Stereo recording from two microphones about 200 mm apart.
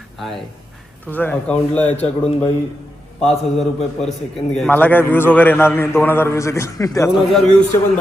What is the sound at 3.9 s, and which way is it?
A man's voice, centre (ahead or behind).